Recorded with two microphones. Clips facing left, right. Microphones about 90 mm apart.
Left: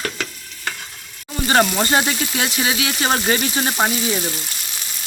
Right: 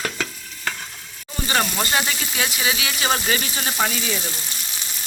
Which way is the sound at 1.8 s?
40° left (ahead or behind).